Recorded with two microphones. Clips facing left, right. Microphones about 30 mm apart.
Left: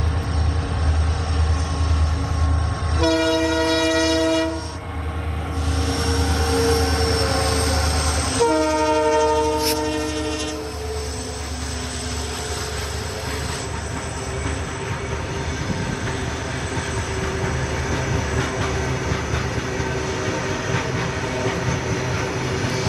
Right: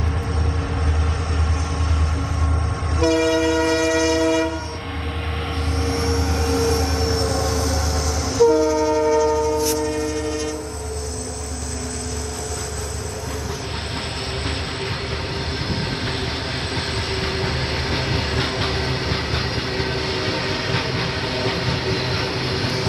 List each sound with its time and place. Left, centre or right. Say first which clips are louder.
3.0 s train: right 1 dB; centre
5.8 s vehicle: even; centre; by 8.0 s left
8.3 s train: right 3 dB; centre
16.7 s train: right 2 dB; right